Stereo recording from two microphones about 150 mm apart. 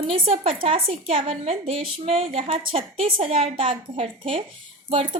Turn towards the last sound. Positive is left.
turn(degrees=-40)  # may be behind; listen again after turning